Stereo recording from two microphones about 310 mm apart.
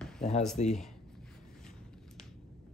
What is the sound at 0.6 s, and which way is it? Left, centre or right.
Speech, left.